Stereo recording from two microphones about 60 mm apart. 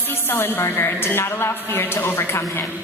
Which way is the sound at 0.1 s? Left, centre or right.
Left.